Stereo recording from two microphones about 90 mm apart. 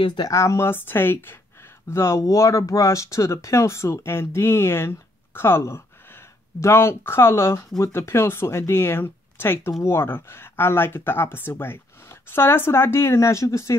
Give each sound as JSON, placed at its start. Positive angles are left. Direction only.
{"t": 0.0, "sound": "speech", "side_deg": 55}
{"t": 0.3, "sound": "speech", "side_deg": 30}